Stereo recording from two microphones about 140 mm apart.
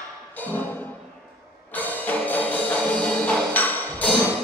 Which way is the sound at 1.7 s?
10° left (ahead or behind).